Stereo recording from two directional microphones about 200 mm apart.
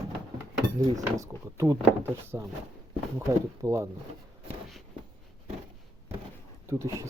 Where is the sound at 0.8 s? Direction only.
15° right (ahead or behind).